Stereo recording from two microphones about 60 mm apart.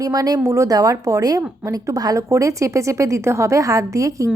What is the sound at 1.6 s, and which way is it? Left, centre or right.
Speech, right.